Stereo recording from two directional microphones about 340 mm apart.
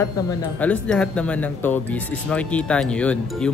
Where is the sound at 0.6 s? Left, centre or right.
Centre.